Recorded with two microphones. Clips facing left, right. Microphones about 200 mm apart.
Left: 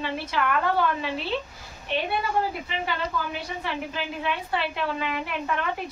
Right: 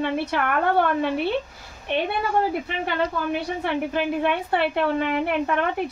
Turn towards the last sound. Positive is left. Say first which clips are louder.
# right 7 dB
turn(degrees=-55)  # may be behind; listen again after turning